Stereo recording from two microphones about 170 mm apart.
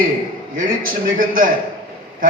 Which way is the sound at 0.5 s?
55° right (ahead or behind).